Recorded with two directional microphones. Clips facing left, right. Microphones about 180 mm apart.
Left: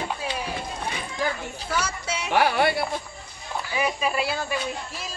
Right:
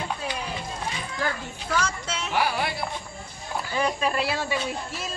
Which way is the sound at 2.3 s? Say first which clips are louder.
Left 5 dB; 65° left (ahead or behind).